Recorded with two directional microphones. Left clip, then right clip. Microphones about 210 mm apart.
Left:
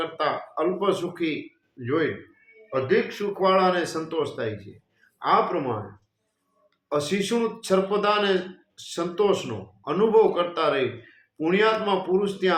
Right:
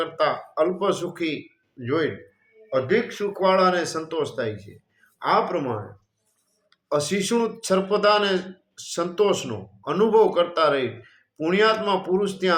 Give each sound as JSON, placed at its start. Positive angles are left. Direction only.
{"t": 0.0, "sound": "speech", "side_deg": -20}
{"t": 6.8, "sound": "speech", "side_deg": -20}